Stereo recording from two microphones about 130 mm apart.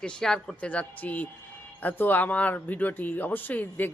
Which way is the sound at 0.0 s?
5° left (ahead or behind).